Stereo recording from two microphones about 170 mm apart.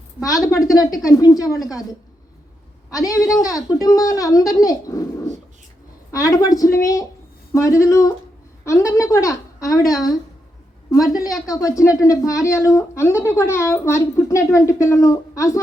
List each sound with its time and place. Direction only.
0.2 s speech: 20° left (ahead or behind)
2.9 s speech: 20° left (ahead or behind)
6.1 s speech: 20° left (ahead or behind)
10.9 s speech: 20° left (ahead or behind)